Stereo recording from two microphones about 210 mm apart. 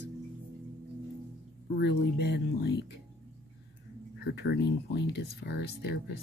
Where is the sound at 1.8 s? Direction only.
55° left (ahead or behind).